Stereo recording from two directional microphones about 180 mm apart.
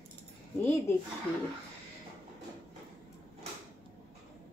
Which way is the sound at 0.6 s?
15° left (ahead or behind).